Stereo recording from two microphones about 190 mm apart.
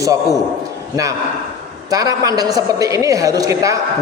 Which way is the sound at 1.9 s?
20° right (ahead or behind).